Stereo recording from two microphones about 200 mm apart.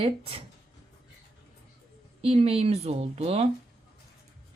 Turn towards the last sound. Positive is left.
turn(degrees=-30)  # may be behind; listen again after turning